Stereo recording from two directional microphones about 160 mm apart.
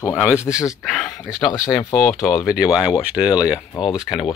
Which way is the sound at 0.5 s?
20° left (ahead or behind).